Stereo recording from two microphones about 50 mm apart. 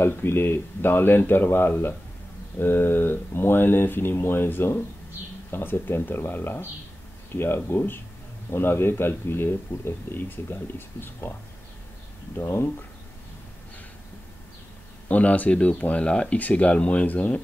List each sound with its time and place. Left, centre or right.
0.0 s speech: left
12.4 s speech: left
15.0 s speech: left
16.1 s speech: centre
16.3 s speech: left